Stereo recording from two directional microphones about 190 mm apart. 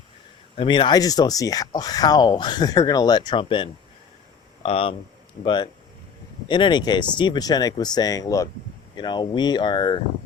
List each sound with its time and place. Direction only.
0.5 s speech: 25° left (ahead or behind)